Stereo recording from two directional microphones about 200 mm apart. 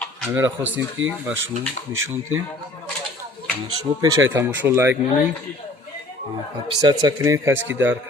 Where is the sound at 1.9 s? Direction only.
85° right.